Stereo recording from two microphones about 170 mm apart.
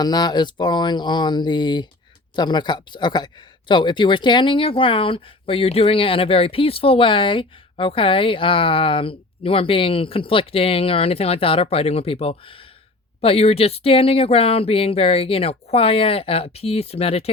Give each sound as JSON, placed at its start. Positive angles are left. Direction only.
{"t": 0.0, "sound": "speech", "side_deg": 25}